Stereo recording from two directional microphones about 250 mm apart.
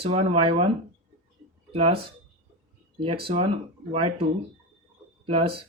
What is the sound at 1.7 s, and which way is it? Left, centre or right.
Speech, right.